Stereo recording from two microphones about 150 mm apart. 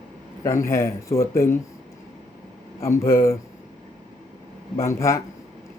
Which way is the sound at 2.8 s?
20° left (ahead or behind).